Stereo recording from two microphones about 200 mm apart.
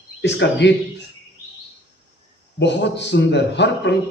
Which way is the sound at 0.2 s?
60° left (ahead or behind).